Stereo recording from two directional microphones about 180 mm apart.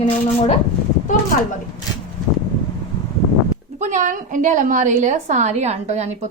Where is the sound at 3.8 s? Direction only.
45° right (ahead or behind).